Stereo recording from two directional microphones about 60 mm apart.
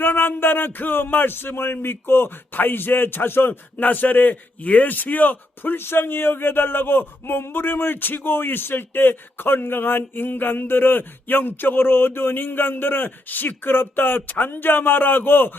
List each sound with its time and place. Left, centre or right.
0.0 s speech: left